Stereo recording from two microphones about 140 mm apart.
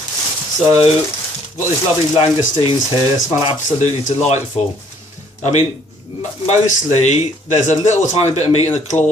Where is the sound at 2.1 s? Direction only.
40° left (ahead or behind).